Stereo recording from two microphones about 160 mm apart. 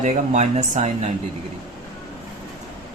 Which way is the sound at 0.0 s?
50° right (ahead or behind).